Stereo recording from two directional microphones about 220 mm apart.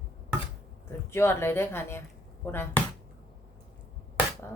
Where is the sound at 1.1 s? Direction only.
10° left (ahead or behind).